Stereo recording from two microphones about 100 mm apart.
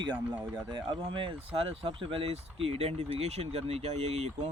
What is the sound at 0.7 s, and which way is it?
Speech, 50° right (ahead or behind).